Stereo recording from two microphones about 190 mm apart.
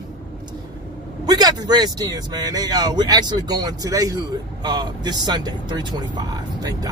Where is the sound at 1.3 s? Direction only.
20° right (ahead or behind).